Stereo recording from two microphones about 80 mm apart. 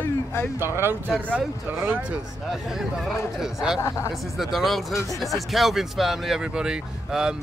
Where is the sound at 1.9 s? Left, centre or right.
Centre.